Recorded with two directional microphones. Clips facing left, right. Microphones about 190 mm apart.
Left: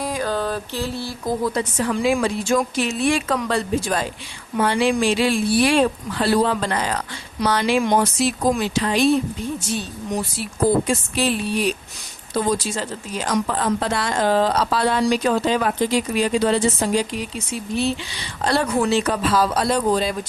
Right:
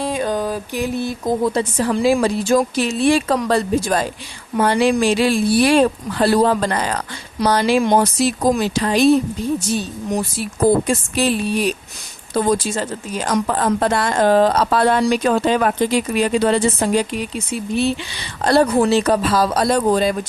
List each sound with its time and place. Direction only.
0.0 s speech: 25° right (ahead or behind); by 9.8 s 40° right (ahead or behind)
10.8 s a woman's voice: 45° right (ahead or behind)
18.4 s speech: 35° right (ahead or behind)